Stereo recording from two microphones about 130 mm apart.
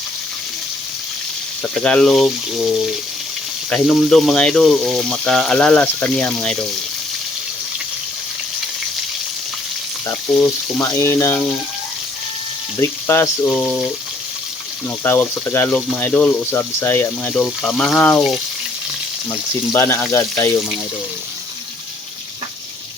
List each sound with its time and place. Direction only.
1.6 s speech: 5° left (ahead or behind)
3.7 s speech: 5° left (ahead or behind)
10.3 s speech: centre (ahead or behind)
10.8 s speech: 20° left (ahead or behind)
12.8 s speech: 20° left (ahead or behind)
13.5 s speech: 5° left (ahead or behind)
15.0 s speech: 15° left (ahead or behind)
19.3 s speech: 20° left (ahead or behind)